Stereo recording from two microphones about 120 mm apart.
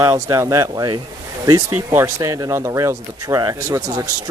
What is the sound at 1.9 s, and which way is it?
Speech, 25° right (ahead or behind).